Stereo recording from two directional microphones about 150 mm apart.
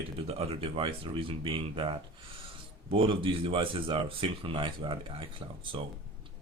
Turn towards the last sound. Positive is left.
turn(degrees=-35)  # may be behind; listen again after turning